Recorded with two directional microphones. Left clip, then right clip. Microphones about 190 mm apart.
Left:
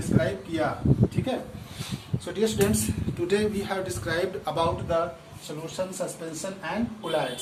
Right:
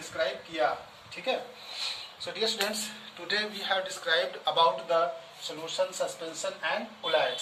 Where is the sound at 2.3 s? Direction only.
Centre (ahead or behind).